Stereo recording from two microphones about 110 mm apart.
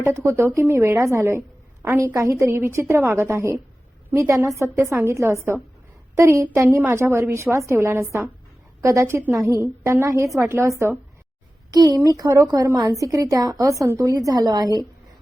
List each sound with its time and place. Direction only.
0.0 s a woman's voice: 25° right (ahead or behind)
11.7 s a woman's voice: 35° right (ahead or behind)